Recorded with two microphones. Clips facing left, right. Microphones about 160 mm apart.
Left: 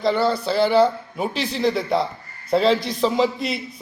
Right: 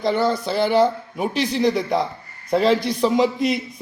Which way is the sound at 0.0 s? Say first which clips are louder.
Even; 20° right (ahead or behind).